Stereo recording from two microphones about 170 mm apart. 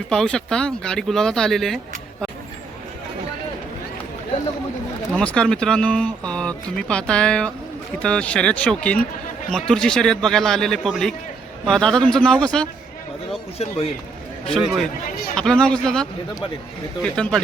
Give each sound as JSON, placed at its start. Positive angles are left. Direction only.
{"t": 0.1, "sound": "speech", "side_deg": 5}
{"t": 5.1, "sound": "speech", "side_deg": 5}
{"t": 13.6, "sound": "a man's voice", "side_deg": 35}
{"t": 14.4, "sound": "speech", "side_deg": 5}